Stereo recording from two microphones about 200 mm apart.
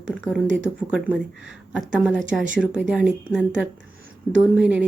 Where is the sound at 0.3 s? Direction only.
10° right (ahead or behind).